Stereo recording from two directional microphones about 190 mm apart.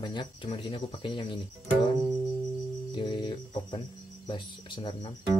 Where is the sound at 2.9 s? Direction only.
25° left (ahead or behind).